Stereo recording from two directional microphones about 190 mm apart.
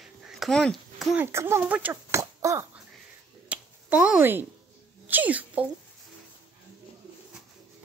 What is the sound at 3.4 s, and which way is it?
Finger snapping, 5° right (ahead or behind).